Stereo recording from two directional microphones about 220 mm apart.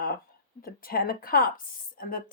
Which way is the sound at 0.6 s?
40° left (ahead or behind).